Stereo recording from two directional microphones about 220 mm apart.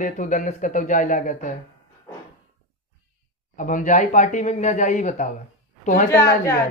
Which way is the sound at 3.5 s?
35° left (ahead or behind).